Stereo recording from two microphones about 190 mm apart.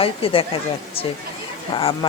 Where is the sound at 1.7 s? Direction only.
30° left (ahead or behind).